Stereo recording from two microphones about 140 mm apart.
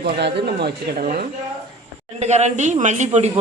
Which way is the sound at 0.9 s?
90° right.